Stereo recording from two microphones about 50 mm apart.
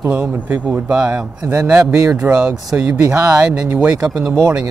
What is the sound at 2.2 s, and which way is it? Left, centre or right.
Speech, right.